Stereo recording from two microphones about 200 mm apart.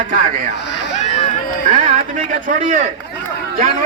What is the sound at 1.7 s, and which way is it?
Speech, 40° right (ahead or behind).